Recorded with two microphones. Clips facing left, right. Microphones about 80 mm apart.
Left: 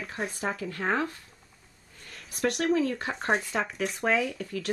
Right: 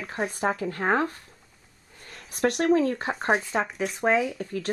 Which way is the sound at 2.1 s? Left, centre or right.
Right.